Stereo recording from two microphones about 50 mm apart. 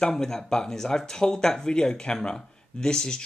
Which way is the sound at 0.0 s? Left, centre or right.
Centre.